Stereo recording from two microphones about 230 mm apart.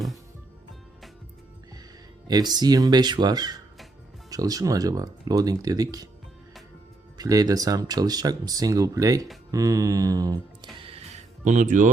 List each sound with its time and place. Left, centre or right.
2.2 s speech: centre
7.2 s speech: centre
9.5 s mantra: centre
10.8 s music: right